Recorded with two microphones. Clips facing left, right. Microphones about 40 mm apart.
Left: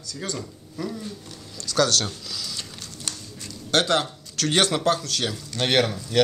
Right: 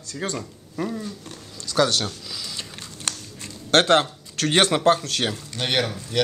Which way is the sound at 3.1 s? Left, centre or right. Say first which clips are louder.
Right 4 dB; right.